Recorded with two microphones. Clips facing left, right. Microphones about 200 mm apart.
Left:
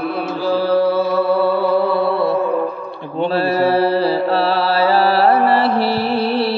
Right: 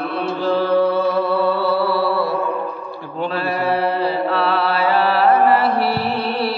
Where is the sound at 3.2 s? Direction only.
35° left (ahead or behind).